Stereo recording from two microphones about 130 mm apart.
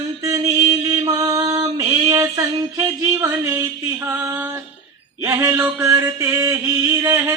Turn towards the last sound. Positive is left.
turn(degrees=-25)  # may be behind; listen again after turning